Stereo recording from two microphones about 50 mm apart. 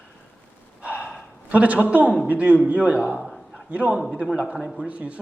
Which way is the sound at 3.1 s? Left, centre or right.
Centre.